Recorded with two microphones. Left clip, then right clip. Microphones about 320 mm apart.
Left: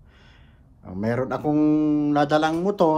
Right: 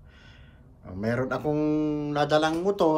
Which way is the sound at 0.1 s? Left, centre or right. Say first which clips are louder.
Right 1 dB; centre.